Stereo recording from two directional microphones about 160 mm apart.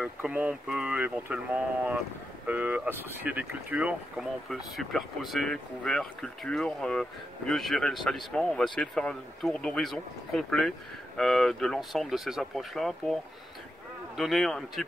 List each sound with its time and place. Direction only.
0.0 s speech: 5° right (ahead or behind)